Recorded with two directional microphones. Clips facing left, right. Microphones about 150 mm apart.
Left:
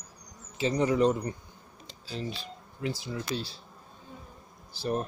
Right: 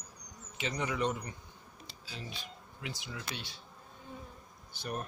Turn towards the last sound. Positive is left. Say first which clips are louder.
# left 9 dB
turn(degrees=30)  # may be behind; listen again after turning